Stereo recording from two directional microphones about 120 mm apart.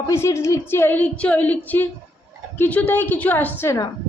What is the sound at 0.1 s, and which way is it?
A woman's voice, 25° left (ahead or behind).